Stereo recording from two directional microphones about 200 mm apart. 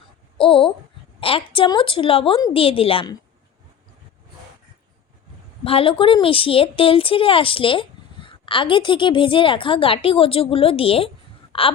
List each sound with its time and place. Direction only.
0.3 s a sound: 25° left (ahead or behind)
1.2 s a woman's voice: 25° left (ahead or behind)
5.6 s a woman's voice: 25° left (ahead or behind)